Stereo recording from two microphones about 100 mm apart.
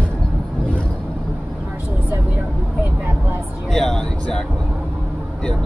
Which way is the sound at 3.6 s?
5° left (ahead or behind).